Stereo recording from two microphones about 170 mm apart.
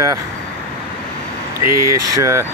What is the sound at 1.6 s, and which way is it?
Speech, 15° right (ahead or behind).